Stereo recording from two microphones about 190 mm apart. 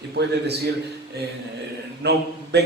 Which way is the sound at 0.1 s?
60° right (ahead or behind).